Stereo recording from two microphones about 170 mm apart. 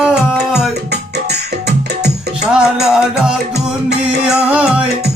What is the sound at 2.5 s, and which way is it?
Music, 5° right (ahead or behind).